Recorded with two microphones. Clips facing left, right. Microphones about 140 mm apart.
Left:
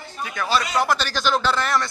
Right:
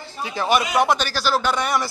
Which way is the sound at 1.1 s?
5° right (ahead or behind).